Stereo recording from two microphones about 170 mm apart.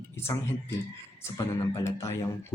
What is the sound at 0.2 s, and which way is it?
Speech, 15° left (ahead or behind).